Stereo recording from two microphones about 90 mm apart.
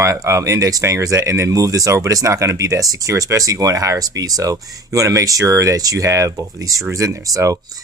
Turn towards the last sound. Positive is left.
turn(degrees=-40)  # may be behind; listen again after turning